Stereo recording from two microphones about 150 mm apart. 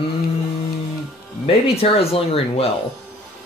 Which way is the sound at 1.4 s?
40° left (ahead or behind).